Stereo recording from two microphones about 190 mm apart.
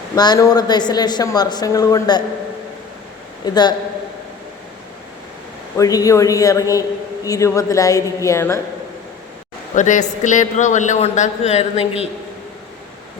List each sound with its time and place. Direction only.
0.2 s a woman's voice: 20° left (ahead or behind)
3.4 s a woman's voice: 20° left (ahead or behind)
5.7 s a woman's voice: 20° left (ahead or behind)
9.7 s a man's voice: 40° left (ahead or behind)